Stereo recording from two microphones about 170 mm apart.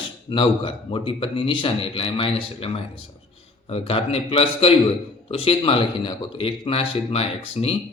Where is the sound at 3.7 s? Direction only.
35° left (ahead or behind).